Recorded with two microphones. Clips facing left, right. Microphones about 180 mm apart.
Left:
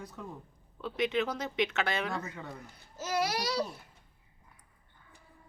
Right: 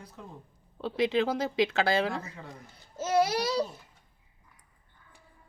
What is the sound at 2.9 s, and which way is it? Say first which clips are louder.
Babbling: right 6 dB; 25° right (ahead or behind).